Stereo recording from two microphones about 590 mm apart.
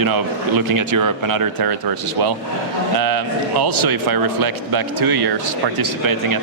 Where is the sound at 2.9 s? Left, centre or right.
Right.